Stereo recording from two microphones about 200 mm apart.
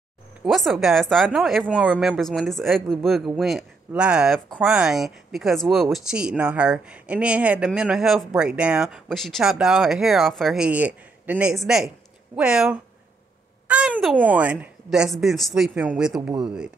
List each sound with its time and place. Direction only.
0.5 s a child's voice: centre (ahead or behind)